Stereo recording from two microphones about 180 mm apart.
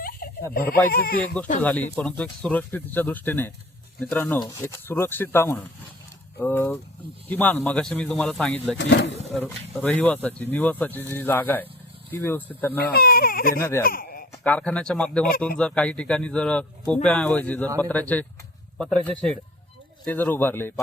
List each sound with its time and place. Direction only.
0.5 s speech: 60° left (ahead or behind)
1.6 s speech: 10° left (ahead or behind)
8.8 s speech: 80° left
9.7 s speech: 10° left (ahead or behind)
12.8 s speech: 60° left (ahead or behind)
13.6 s speech: 15° left (ahead or behind)
13.8 s a sound: 55° left (ahead or behind)
14.4 s speech: 10° left (ahead or behind)